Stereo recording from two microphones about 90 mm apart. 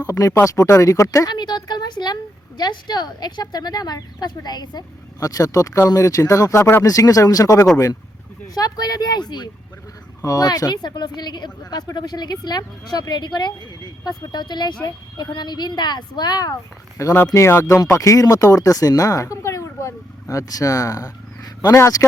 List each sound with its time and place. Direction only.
0.1 s speech: 40° left (ahead or behind)
1.3 s a sound: 50° left (ahead or behind)
2.6 s speech: 50° left (ahead or behind)
5.2 s speech: 40° left (ahead or behind)
6.8 s speech: 40° left (ahead or behind)
17.0 s speech: 35° left (ahead or behind)